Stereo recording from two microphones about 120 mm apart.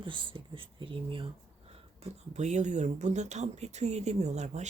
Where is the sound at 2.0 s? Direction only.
70° right (ahead or behind).